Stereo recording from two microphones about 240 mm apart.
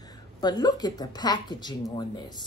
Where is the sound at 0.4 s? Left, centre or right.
Centre.